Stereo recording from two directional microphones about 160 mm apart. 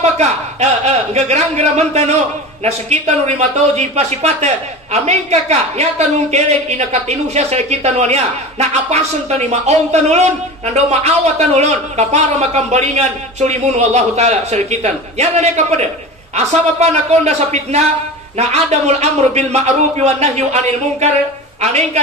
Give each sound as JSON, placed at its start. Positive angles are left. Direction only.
{"t": 0.0, "sound": "a man's voice", "side_deg": -45}